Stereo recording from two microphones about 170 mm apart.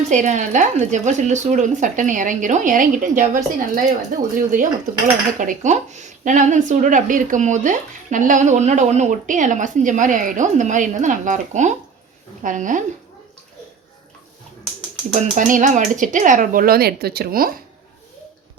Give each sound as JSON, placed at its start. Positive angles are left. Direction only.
{"t": 0.1, "sound": "speech", "side_deg": -45}
{"t": 15.1, "sound": "speech", "side_deg": -50}